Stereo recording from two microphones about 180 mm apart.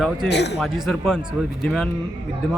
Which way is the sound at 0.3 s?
70° left (ahead or behind).